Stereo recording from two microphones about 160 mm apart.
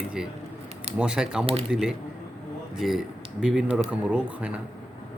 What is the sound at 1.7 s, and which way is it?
Speech, 5° right (ahead or behind).